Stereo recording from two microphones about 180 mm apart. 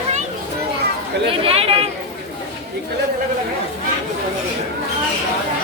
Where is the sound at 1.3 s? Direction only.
35° right (ahead or behind).